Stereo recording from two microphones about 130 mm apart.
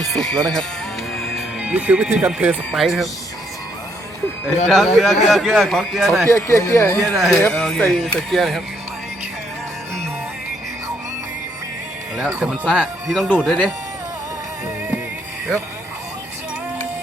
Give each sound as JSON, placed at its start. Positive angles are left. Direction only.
{"t": 0.0, "sound": "music", "side_deg": 5}
{"t": 1.1, "sound": "speech", "side_deg": 0}
{"t": 4.7, "sound": "a man's voice", "side_deg": 0}
{"t": 6.2, "sound": "speech", "side_deg": 20}
{"t": 7.0, "sound": "a man's voice", "side_deg": 0}
{"t": 12.1, "sound": "a man's voice", "side_deg": -5}